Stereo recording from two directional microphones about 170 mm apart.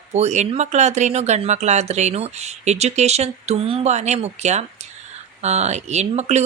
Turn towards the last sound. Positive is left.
turn(degrees=-40)  # may be behind; listen again after turning